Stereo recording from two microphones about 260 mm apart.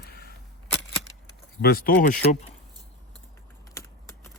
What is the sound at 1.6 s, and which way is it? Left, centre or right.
Speech, left.